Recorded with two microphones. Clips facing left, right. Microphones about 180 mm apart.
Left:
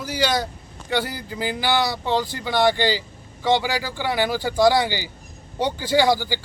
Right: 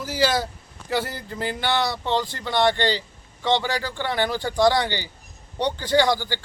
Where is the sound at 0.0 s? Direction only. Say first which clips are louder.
Even; centre (ahead or behind).